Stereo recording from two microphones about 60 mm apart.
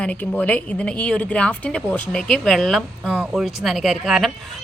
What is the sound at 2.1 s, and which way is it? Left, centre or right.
Speech, centre.